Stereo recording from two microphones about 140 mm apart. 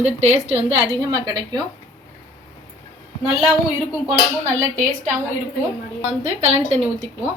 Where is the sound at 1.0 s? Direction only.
30° right (ahead or behind).